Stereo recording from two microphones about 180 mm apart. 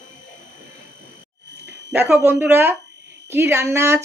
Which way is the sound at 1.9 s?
10° right (ahead or behind).